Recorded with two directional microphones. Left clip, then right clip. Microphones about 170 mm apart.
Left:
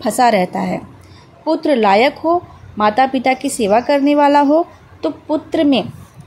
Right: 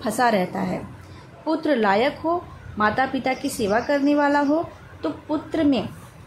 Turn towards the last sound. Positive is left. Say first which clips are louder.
# left 7 dB
turn(degrees=30)  # may be behind; listen again after turning